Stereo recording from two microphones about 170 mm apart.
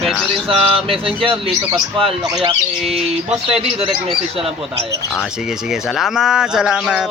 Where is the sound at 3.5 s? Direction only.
35° right (ahead or behind).